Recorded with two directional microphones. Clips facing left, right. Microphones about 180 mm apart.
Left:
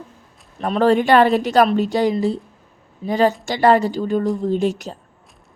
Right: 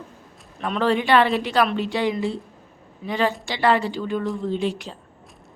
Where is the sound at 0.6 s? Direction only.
40° left (ahead or behind).